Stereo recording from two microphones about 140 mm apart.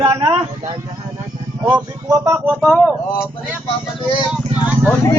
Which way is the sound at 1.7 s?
25° right (ahead or behind).